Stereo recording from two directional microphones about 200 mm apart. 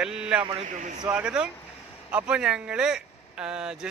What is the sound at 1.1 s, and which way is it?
Speech, 5° right (ahead or behind).